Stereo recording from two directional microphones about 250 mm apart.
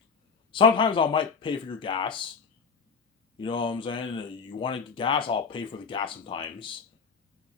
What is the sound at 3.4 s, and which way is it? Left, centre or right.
Speech, centre.